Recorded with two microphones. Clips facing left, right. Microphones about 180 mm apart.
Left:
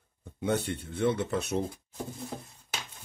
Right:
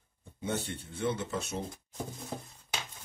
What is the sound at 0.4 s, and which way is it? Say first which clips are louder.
Speech: left 6 dB; 65° left (ahead or behind).